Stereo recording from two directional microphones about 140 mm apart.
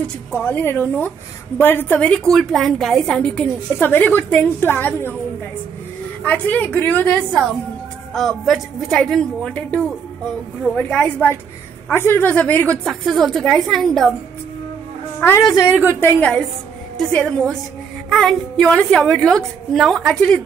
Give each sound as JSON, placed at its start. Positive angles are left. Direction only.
{"t": 0.4, "sound": "a woman's voice", "side_deg": 15}
{"t": 6.2, "sound": "a woman's voice", "side_deg": 10}
{"t": 15.1, "sound": "a woman's voice", "side_deg": 15}